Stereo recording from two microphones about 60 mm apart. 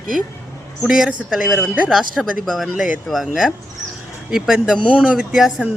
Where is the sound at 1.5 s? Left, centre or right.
Right.